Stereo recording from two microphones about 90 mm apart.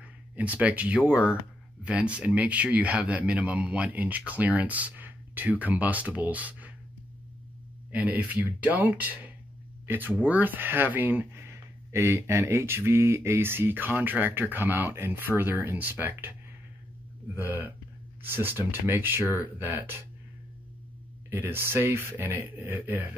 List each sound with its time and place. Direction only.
0.0 s speech: 15° right (ahead or behind)
7.9 s speech: 20° right (ahead or behind)
17.4 s speech: 20° right (ahead or behind)
21.3 s speech: 25° right (ahead or behind)